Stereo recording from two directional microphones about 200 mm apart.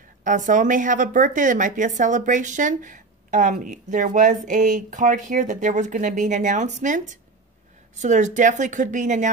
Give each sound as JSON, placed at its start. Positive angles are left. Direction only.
{"t": 0.2, "sound": "speech", "side_deg": -40}